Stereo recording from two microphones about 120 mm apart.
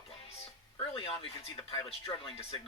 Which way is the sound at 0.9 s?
50° left (ahead or behind).